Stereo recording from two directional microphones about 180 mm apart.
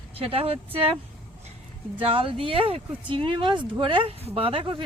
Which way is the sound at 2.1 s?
30° right (ahead or behind).